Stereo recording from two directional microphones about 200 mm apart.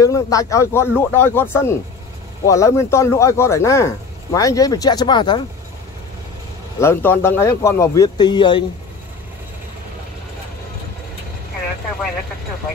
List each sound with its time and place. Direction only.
0.0 s speech: 15° left (ahead or behind)
6.8 s speech: 10° left (ahead or behind)